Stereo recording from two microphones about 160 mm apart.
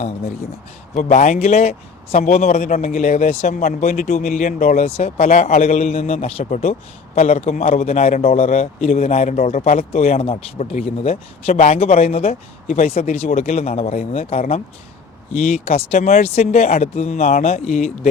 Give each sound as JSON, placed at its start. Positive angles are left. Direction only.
{"t": 0.9, "sound": "speech", "side_deg": 50}
{"t": 3.6, "sound": "speech", "side_deg": 60}
{"t": 4.1, "sound": "a man's voice", "side_deg": 50}